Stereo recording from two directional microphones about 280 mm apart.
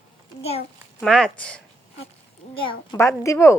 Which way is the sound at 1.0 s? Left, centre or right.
Centre.